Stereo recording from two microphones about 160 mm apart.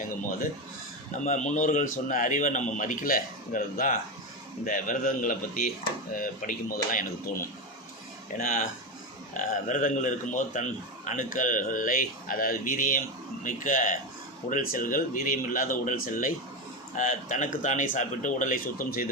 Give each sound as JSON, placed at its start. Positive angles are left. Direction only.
{"t": 1.2, "sound": "speech", "side_deg": 50}